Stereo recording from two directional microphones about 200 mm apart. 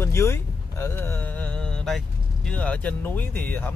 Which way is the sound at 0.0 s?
15° left (ahead or behind).